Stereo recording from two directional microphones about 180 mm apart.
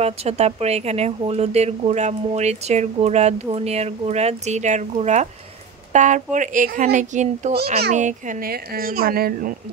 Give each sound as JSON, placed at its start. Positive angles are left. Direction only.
{"t": 0.0, "sound": "a child's voice", "side_deg": -35}